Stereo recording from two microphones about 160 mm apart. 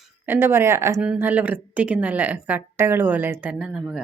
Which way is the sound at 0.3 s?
15° right (ahead or behind).